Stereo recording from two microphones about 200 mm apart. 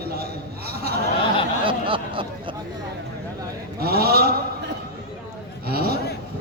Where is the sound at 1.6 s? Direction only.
25° right (ahead or behind).